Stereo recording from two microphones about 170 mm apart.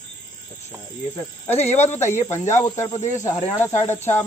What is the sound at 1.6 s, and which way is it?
Speech, 40° left (ahead or behind).